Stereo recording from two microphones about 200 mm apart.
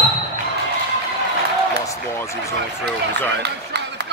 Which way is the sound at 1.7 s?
15° left (ahead or behind).